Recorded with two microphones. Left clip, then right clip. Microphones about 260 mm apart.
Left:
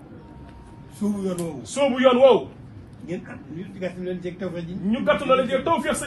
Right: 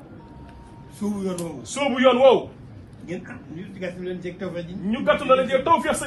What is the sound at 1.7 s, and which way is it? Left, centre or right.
Speech, right.